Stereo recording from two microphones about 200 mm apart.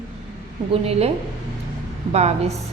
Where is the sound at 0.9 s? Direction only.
30° right (ahead or behind).